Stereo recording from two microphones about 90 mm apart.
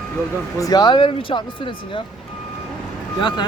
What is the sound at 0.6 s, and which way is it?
Speech, 45° left (ahead or behind).